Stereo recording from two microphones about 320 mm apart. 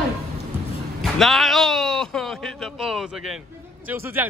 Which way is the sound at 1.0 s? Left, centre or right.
Centre.